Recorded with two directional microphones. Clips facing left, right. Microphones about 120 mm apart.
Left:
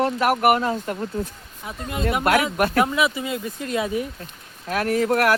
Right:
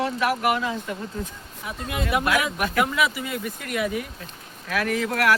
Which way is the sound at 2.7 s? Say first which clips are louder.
Left 3 dB; 25° left (ahead or behind).